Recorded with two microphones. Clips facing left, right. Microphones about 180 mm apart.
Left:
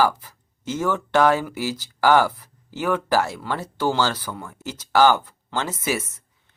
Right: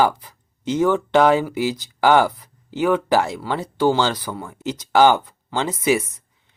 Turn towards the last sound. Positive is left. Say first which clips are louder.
# right 2 dB
turn(degrees=-15)  # may be behind; listen again after turning